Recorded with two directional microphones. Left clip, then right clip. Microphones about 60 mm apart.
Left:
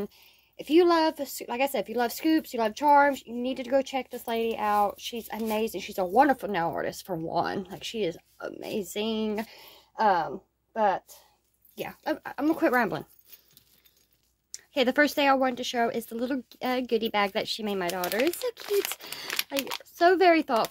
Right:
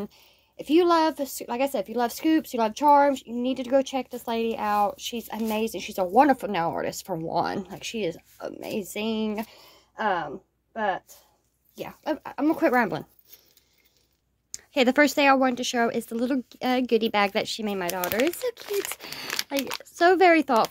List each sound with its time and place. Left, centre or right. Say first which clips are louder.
0.6 s speech: right 1 dB; right
1.6 s speech: right 1 dB; right
2.3 s a woman's voice: right 2 dB; right
4.4 s a woman's voice: right 1 dB; right
9.5 s speech: left 1 dB; centre
12.2 s a woman's voice: right 3 dB; right
14.5 s speech: right 3 dB; right
16.8 s a woman's voice: right 4 dB; right
17.5 s a woman's voice: right 1 dB; right
19.0 s a sound: right 2 dB; right
19.8 s speech: right 2 dB; right